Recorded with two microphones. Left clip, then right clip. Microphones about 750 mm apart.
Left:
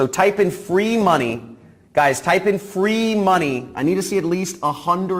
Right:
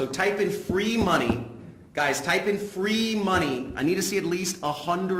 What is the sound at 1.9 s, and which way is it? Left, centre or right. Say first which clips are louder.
A man's voice: left 8 dB; left.